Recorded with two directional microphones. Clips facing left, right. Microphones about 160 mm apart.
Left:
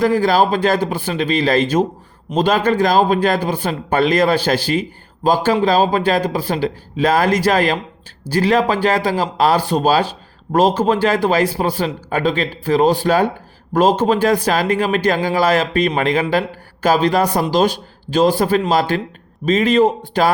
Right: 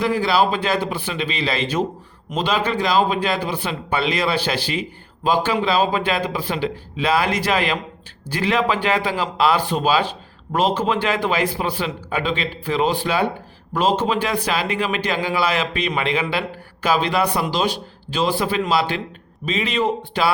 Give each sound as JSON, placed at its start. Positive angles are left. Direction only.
{"t": 0.0, "sound": "speech", "side_deg": 45}